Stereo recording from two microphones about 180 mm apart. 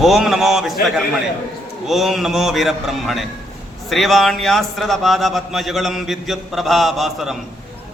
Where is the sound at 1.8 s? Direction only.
Centre (ahead or behind).